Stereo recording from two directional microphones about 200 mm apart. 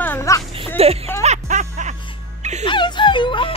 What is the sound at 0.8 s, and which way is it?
Speech, 30° right (ahead or behind).